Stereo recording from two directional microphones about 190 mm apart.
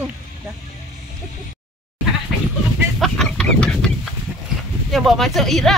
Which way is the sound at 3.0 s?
5° left (ahead or behind).